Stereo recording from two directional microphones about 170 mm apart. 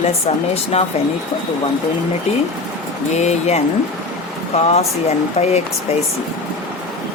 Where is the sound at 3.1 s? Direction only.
40° left (ahead or behind).